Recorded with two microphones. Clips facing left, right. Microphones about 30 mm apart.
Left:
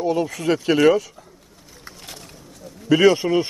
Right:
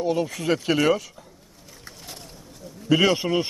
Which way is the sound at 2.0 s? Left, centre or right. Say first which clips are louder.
Left 2 dB; left.